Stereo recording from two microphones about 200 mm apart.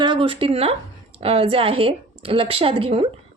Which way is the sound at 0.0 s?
25° right (ahead or behind).